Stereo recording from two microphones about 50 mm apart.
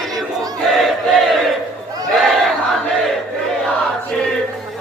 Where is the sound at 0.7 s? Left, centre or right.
Centre.